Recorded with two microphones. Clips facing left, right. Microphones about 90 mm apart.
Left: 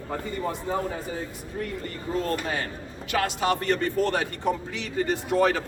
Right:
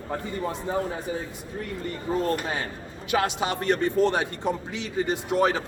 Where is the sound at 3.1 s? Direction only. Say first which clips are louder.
Even; 20° right (ahead or behind).